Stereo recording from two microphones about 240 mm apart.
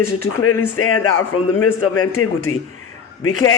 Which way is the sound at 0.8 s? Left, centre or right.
Left.